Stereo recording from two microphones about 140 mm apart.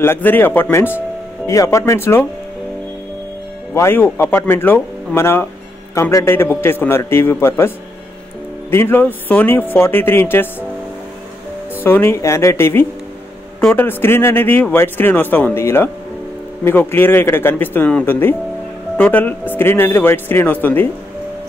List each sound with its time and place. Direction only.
0.0 s speech: 15° left (ahead or behind)
3.7 s speech: 15° left (ahead or behind)
11.8 s speech: 15° left (ahead or behind)